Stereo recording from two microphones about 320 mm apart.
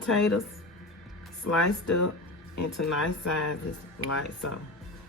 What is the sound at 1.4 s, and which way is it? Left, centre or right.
Speech, left.